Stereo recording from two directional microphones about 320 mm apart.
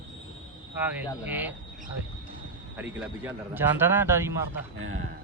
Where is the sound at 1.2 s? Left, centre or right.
Centre.